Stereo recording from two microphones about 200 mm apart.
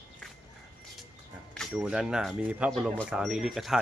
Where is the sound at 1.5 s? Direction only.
Centre (ahead or behind).